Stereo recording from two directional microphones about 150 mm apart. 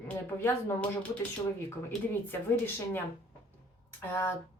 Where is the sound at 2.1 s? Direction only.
15° left (ahead or behind).